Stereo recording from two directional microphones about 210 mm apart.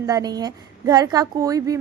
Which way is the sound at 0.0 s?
15° right (ahead or behind).